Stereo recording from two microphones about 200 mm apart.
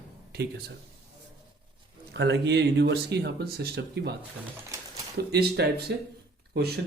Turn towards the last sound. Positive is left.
turn(degrees=-55)  # may be behind; listen again after turning